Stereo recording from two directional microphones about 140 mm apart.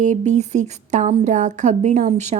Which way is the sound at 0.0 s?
55° right (ahead or behind).